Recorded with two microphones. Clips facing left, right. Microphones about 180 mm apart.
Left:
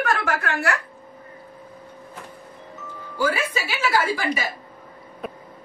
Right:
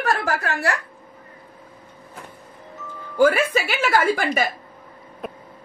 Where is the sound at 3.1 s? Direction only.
55° right (ahead or behind).